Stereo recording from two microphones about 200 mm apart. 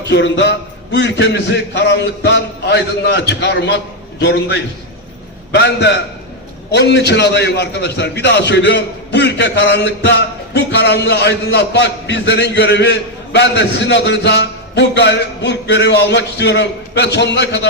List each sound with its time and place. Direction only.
0.0 s a man's voice: 60° left (ahead or behind)